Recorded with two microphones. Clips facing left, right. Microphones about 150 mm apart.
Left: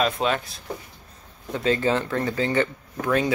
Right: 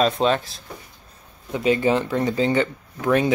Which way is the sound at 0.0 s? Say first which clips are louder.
Right 4 dB; 30° right (ahead or behind).